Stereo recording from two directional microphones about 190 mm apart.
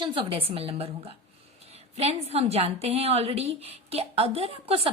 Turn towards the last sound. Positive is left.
turn(degrees=-30)  # may be behind; listen again after turning